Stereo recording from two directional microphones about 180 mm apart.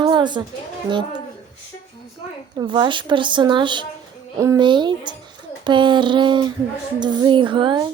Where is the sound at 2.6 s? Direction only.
25° right (ahead or behind).